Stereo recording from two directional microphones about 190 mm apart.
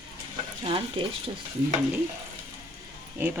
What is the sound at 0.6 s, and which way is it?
Speech, 25° right (ahead or behind).